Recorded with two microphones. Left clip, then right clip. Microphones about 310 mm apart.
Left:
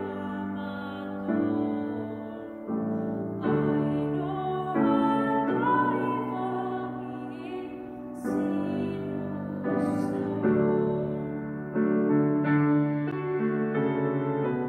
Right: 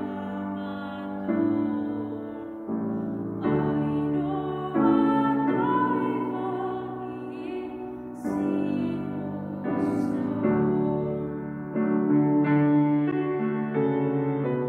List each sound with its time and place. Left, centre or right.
1.2 s music: centre
3.4 s music: centre
8.4 s music: centre
10.2 s music: centre